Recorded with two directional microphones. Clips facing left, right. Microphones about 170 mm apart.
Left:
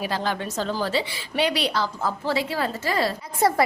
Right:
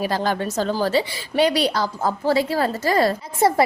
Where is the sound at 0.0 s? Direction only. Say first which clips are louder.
Right 4 dB; 40° right (ahead or behind).